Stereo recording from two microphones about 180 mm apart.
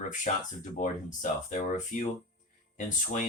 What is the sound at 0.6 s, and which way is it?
Speech, 45° left (ahead or behind).